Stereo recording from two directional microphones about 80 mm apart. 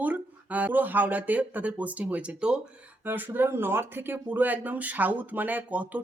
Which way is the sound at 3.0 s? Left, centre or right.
Right.